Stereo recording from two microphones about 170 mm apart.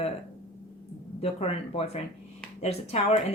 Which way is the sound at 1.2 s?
35° left (ahead or behind).